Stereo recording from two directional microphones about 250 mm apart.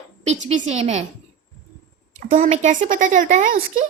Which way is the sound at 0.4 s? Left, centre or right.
Right.